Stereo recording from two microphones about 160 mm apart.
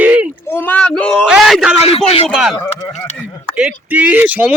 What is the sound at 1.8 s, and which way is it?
Speech, 35° left (ahead or behind).